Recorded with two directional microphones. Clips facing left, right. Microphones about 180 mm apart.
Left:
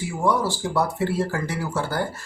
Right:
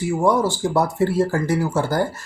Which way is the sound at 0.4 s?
45° right (ahead or behind).